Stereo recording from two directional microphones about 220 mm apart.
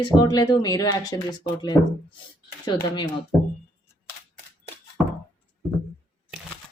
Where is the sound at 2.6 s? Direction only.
20° left (ahead or behind).